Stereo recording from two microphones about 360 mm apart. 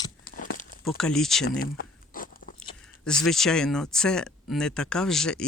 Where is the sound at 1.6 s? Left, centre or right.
Left.